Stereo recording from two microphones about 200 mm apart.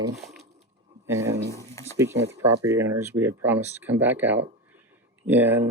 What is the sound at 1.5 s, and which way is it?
Speech, 15° left (ahead or behind).